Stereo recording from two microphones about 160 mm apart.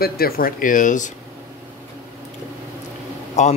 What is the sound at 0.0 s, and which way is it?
Speech, 65° left (ahead or behind).